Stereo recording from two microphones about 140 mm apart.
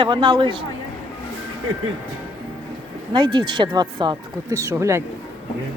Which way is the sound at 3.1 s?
35° right (ahead or behind).